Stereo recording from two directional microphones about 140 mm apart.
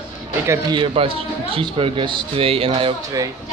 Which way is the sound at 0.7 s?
40° right (ahead or behind).